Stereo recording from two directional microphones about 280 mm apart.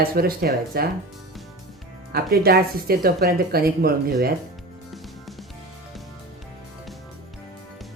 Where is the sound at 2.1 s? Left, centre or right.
Right.